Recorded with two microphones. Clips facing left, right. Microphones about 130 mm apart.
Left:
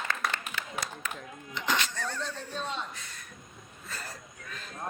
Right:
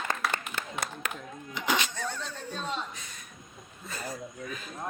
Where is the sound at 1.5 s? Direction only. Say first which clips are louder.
Right 1 dB; 10° right (ahead or behind).